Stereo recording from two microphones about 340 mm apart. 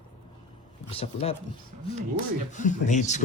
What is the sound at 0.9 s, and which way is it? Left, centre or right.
Speech, centre.